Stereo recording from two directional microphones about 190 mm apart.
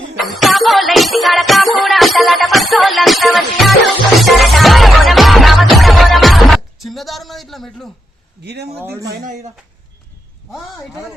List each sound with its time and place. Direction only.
0.2 s music: centre (ahead or behind)
8.8 s speech: 10° right (ahead or behind)
9.0 s speech: 40° right (ahead or behind)